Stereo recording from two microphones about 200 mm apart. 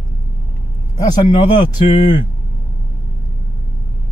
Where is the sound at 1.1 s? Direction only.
25° left (ahead or behind).